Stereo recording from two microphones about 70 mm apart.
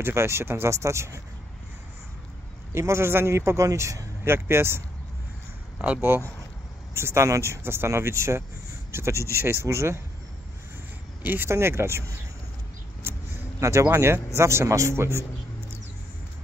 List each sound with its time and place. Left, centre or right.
0.0 s a man's voice: right
2.7 s a man's voice: right
5.9 s a man's voice: right
11.2 s a man's voice: right
13.0 s a sound: right
13.6 s a man's voice: right